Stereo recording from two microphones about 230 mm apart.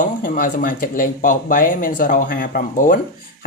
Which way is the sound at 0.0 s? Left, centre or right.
Left.